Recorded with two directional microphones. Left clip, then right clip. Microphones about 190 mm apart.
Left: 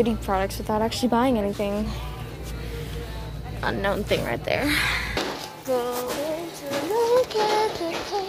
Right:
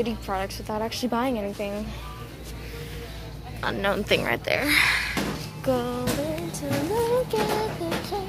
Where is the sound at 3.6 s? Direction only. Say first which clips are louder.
Even; 10° right (ahead or behind).